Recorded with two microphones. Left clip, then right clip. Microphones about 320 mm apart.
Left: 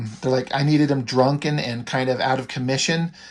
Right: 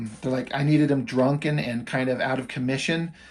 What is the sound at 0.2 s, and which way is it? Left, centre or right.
Speech, centre.